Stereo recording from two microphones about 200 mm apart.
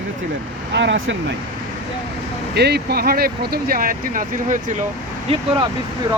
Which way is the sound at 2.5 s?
55° right (ahead or behind).